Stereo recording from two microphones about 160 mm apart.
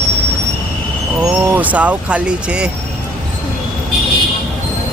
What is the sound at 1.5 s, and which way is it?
Speech, 10° right (ahead or behind).